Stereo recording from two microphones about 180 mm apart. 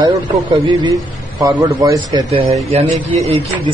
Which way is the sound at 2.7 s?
35° right (ahead or behind).